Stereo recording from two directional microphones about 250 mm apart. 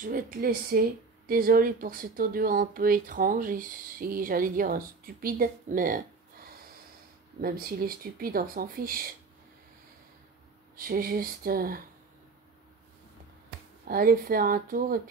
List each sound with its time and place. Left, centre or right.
0.0 s a woman's voice: right
7.4 s a woman's voice: right
10.8 s a woman's voice: right
13.8 s a woman's voice: right